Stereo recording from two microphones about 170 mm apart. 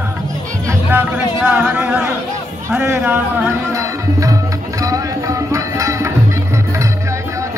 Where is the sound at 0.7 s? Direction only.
15° right (ahead or behind).